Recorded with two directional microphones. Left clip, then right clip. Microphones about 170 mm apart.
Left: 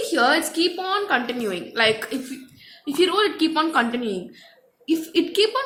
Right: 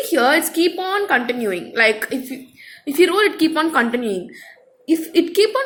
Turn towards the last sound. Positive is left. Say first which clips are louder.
# right 4 dB
turn(degrees=-10)  # may be behind; listen again after turning